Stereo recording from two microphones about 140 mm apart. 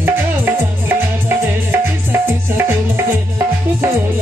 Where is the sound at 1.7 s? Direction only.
15° right (ahead or behind).